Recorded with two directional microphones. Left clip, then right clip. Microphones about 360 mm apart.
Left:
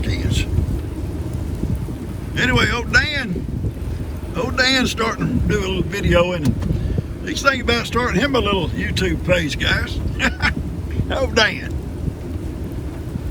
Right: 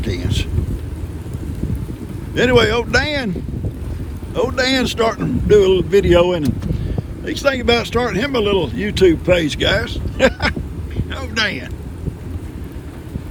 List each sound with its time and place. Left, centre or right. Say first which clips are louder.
0.0 s boat: right 1 dB; centre
2.3 s speech: right 5 dB; centre
4.4 s speech: right 1 dB; centre